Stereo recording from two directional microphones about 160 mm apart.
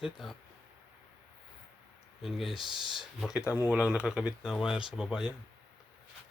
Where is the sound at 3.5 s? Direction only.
20° left (ahead or behind).